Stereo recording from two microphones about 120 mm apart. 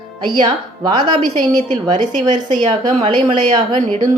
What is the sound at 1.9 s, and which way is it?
Speech, 90° right.